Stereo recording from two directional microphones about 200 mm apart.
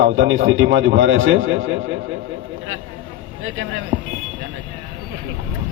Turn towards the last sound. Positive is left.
turn(degrees=-70)  # may be behind; listen again after turning